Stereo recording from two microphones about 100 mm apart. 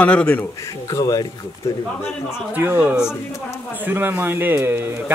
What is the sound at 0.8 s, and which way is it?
Speech, 35° left (ahead or behind).